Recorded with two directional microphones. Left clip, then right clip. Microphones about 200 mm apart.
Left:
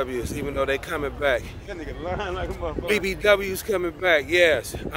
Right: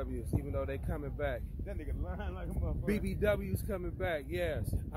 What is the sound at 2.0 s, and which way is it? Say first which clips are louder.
Speech: left 19 dB; 60° right (ahead or behind).